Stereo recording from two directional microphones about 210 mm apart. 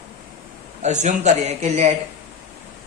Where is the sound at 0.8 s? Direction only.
35° right (ahead or behind).